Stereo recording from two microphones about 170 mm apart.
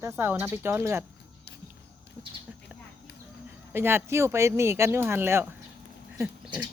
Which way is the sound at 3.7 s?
15° right (ahead or behind).